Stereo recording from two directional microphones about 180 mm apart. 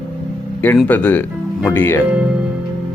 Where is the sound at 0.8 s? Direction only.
10° left (ahead or behind).